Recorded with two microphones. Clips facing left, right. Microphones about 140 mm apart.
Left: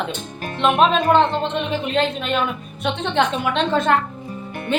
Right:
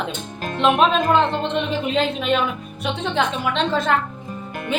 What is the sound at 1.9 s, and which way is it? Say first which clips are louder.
A woman's voice: right 1 dB; centre (ahead or behind).